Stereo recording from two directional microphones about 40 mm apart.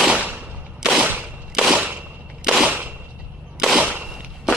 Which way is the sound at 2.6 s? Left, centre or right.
Right.